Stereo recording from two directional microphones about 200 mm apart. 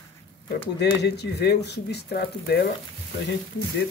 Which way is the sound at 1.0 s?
55° left (ahead or behind).